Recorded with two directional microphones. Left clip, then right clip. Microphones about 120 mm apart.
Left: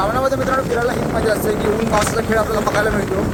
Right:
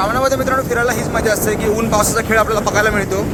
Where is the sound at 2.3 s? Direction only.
20° right (ahead or behind).